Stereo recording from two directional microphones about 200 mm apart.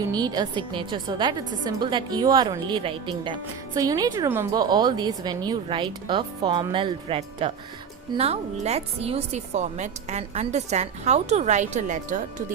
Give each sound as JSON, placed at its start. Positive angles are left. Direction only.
{"t": 0.1, "sound": "a woman's voice", "side_deg": -20}